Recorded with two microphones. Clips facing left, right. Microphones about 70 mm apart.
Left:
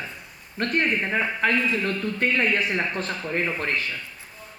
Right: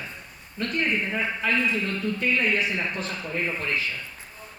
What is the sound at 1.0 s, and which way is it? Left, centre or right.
Speech, left.